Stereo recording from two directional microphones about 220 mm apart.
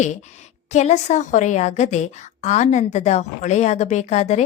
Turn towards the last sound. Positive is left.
turn(degrees=30)  # may be behind; listen again after turning